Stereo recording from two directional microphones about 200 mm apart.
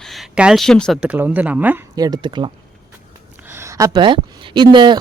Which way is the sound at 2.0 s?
20° right (ahead or behind).